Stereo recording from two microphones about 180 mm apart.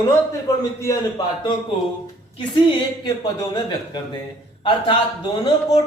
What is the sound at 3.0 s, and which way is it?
Speech, 20° left (ahead or behind).